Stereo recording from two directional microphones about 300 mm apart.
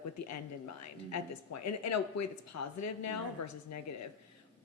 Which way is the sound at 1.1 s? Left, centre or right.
Left.